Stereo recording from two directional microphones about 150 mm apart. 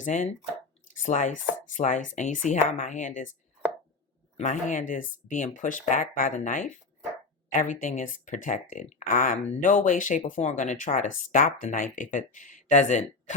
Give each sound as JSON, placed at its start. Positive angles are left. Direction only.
{"t": 0.0, "sound": "speech", "side_deg": 55}
{"t": 4.4, "sound": "speech", "side_deg": 55}